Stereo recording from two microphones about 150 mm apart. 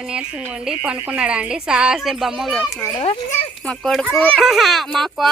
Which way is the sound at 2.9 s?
40° left (ahead or behind).